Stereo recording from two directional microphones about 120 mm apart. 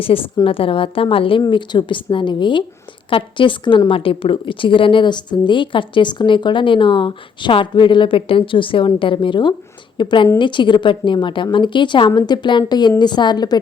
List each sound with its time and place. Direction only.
0.1 s a woman's voice: 50° left (ahead or behind); by 13.6 s 35° left (ahead or behind)